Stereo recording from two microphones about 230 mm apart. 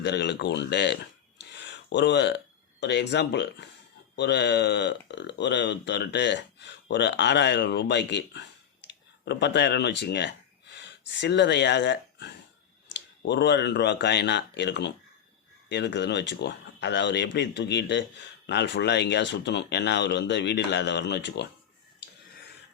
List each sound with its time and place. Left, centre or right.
0.0 s speech: left
1.4 s a sound: left
2.8 s speech: left